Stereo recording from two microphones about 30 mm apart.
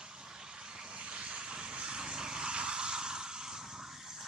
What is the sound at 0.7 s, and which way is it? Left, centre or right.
Vehicle, right.